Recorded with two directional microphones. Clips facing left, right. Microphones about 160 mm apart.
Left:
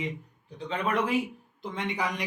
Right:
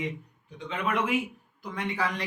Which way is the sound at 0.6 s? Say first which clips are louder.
Left 1 dB; 35° left (ahead or behind).